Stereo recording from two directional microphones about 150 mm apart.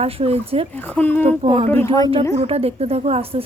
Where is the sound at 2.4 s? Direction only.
40° right (ahead or behind).